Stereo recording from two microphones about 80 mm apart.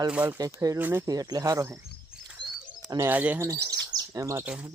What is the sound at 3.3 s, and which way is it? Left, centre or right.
Speech, right.